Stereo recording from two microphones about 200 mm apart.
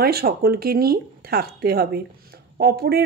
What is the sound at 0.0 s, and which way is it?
A woman's voice, 50° right (ahead or behind).